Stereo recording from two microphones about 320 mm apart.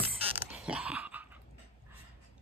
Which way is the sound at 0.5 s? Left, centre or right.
Centre.